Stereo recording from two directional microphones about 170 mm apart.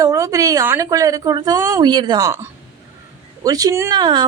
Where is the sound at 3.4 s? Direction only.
20° right (ahead or behind).